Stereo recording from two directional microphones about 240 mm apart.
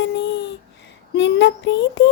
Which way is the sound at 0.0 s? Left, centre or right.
Left.